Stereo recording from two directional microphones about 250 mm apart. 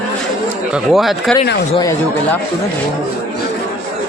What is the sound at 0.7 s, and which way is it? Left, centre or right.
Speech, centre.